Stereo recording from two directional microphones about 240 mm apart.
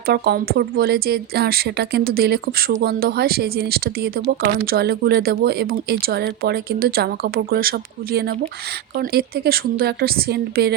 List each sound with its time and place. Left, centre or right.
0.0 s a woman's voice: right